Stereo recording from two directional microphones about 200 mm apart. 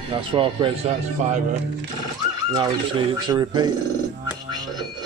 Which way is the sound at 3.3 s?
20° right (ahead or behind).